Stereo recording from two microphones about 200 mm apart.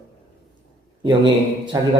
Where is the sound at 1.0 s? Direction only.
25° right (ahead or behind).